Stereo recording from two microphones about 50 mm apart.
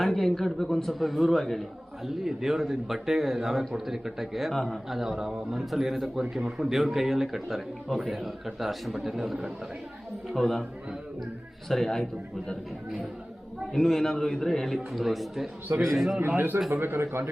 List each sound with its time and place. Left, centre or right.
0.0 s speech: centre
4.9 s speech: centre
11.7 s a man's voice: centre
13.7 s a man's voice: centre
16.2 s speech: right
16.7 s a man's voice: right